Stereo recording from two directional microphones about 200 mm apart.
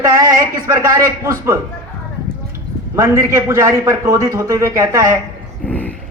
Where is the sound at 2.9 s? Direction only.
15° right (ahead or behind).